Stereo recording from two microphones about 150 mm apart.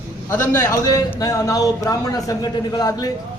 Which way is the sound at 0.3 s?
20° left (ahead or behind).